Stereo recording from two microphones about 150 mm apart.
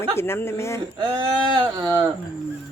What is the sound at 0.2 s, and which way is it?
Speech, 15° left (ahead or behind).